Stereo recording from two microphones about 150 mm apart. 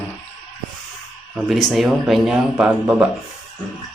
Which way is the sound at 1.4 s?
Centre (ahead or behind).